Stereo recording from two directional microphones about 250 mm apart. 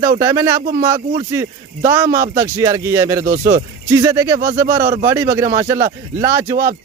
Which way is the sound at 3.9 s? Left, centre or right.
Centre.